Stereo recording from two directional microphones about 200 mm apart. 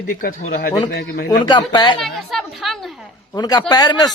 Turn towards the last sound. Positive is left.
turn(degrees=20)  # may be behind; listen again after turning